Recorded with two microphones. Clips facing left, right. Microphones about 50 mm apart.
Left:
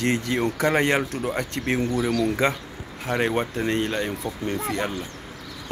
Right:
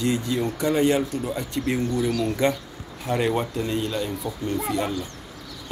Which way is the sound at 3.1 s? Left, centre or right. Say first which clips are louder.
Even; left.